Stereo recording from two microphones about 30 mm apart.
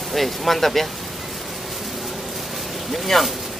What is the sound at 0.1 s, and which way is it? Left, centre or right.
Speech, centre.